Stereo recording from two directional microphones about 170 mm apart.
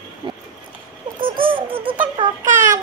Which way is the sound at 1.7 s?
10° right (ahead or behind).